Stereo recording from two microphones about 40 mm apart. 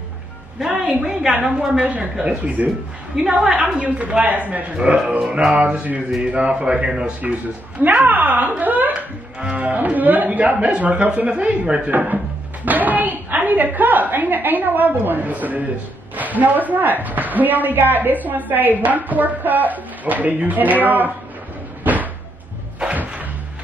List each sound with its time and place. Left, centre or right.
0.8 s a man's voice: right
2.4 s a woman's voice: right
3.3 s a man's voice: right
3.6 s a woman's voice: right
4.7 s a man's voice: right
7.8 s a woman's voice: right
8.9 s music: right
9.7 s a woman's voice: right
12.6 s a woman's voice: right
21.8 s cupboard open or close: right